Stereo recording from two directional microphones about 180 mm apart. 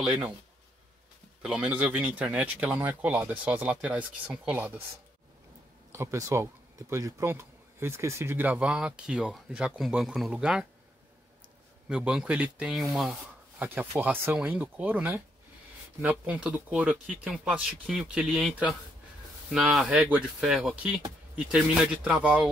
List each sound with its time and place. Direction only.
0.0 s speech: 5° right (ahead or behind)
1.4 s speech: 5° right (ahead or behind)
5.9 s speech: 15° right (ahead or behind)
11.9 s speech: 5° right (ahead or behind)
19.5 s speech: centre (ahead or behind)